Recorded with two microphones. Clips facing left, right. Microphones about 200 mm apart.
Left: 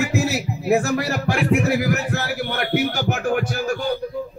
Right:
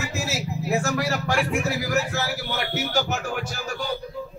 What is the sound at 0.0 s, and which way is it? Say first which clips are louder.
Speech: left 8 dB; 55° left (ahead or behind).